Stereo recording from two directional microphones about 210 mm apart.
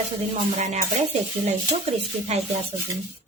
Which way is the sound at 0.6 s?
35° right (ahead or behind).